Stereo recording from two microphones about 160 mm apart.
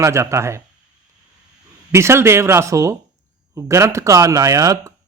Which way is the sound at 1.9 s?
15° right (ahead or behind).